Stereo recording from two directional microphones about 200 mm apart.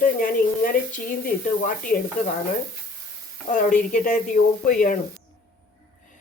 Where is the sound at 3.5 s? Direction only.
40° left (ahead or behind).